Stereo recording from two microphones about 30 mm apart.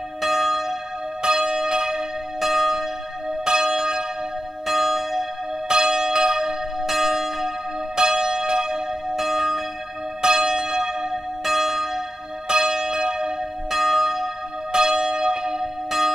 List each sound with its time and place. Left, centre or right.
0.2 s church bell: centre
1.2 s church bell: centre
2.4 s church bell: centre
3.4 s church bell: centre
4.6 s church bell: centre
5.7 s church bell: centre
7.9 s church bell: centre
9.1 s church bell: centre
10.2 s church bell: centre
11.4 s church bell: centre
13.7 s church bell: centre
14.7 s church bell: centre